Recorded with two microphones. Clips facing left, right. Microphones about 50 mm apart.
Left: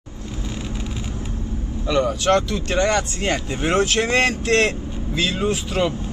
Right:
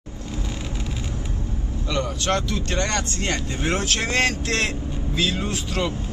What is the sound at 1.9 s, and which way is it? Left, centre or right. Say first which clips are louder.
Speech: left 6 dB; centre.